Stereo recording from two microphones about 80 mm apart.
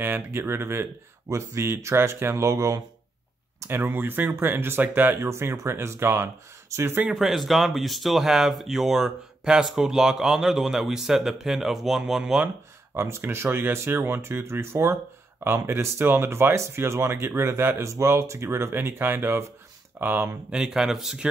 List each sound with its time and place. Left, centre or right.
0.0 s speech: right
3.6 s speech: right
7.1 s speech: centre
12.9 s speech: right
20.5 s speech: centre